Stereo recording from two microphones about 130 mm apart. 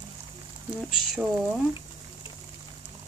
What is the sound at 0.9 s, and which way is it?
Speech, 5° right (ahead or behind).